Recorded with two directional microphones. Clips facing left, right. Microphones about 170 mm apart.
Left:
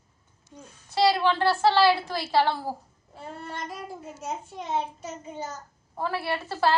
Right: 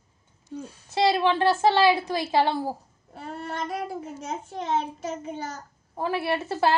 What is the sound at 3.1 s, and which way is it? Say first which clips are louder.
A child's voice: right 4 dB; 75° right (ahead or behind).